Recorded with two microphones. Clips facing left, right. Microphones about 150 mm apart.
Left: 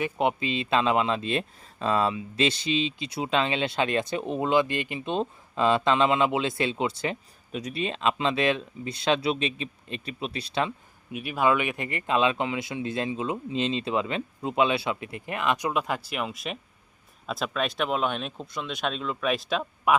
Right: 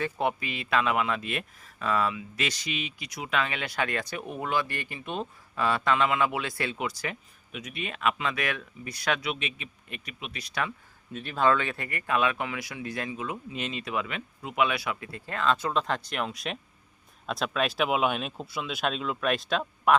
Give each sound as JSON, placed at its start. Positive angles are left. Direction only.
{"t": 0.0, "sound": "speech", "side_deg": 20}
{"t": 11.1, "sound": "speech", "side_deg": 10}